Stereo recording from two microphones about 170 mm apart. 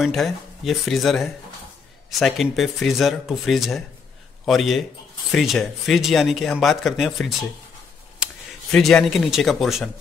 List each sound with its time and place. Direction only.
0.0 s speech: centre (ahead or behind)
8.7 s speech: centre (ahead or behind)